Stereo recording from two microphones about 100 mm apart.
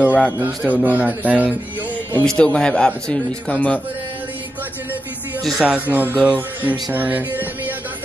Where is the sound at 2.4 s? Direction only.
10° left (ahead or behind).